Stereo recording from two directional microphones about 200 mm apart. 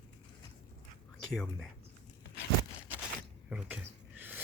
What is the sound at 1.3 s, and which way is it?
Speech, centre (ahead or behind).